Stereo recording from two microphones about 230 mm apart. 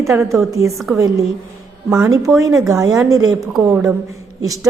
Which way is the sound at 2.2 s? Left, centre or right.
Centre.